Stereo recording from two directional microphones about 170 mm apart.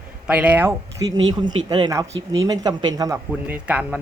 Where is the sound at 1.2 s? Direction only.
25° right (ahead or behind).